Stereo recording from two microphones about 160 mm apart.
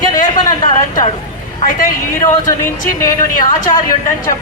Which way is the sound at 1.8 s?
55° left (ahead or behind).